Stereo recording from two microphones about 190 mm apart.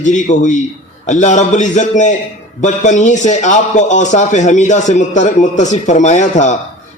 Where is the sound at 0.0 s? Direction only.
40° left (ahead or behind).